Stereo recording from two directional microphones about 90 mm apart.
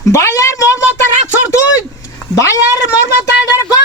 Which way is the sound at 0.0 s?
35° left (ahead or behind).